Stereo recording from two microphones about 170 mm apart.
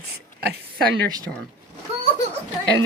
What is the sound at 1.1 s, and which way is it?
Speech, 25° right (ahead or behind).